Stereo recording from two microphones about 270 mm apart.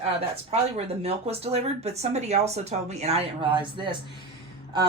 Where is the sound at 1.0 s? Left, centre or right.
Right.